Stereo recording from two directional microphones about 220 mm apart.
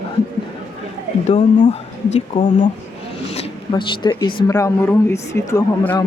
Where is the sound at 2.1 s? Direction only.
30° left (ahead or behind).